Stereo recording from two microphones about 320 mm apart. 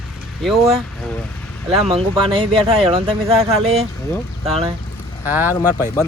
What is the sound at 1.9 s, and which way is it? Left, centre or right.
Speech, centre.